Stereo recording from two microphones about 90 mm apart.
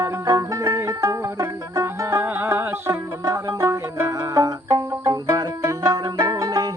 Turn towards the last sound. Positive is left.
turn(degrees=-40)  # may be behind; listen again after turning